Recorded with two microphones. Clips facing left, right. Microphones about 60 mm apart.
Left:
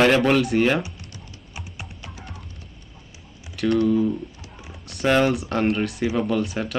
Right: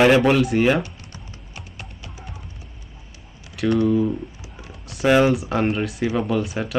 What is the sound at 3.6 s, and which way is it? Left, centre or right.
Speech, centre.